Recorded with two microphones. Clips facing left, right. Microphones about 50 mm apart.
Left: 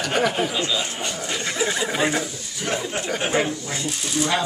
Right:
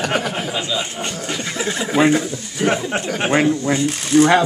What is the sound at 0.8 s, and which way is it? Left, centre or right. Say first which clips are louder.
Speech: right 2 dB; right.